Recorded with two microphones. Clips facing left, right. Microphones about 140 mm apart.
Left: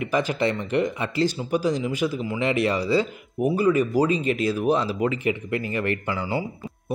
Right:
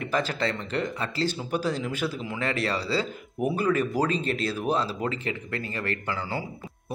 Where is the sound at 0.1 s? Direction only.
15° left (ahead or behind).